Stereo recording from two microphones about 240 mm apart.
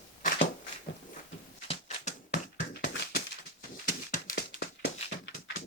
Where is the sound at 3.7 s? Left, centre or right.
Left.